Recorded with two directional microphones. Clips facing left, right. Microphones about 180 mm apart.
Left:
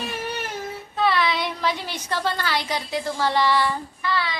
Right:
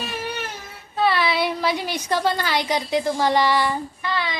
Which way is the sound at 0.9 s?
5° right (ahead or behind).